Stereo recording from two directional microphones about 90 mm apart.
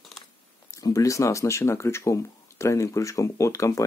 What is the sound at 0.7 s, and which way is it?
Speech, 40° left (ahead or behind).